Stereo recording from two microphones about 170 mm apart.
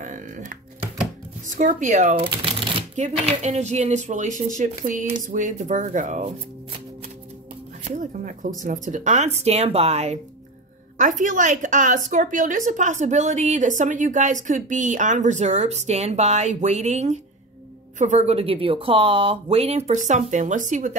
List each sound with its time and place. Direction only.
0.0 s music: 45° right (ahead or behind)
1.5 s a woman's voice: 50° right (ahead or behind)
7.8 s a sound: 45° right (ahead or behind)
8.6 s a woman's voice: 50° right (ahead or behind)